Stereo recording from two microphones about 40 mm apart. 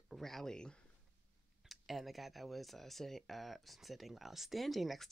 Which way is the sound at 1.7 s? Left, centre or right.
Centre.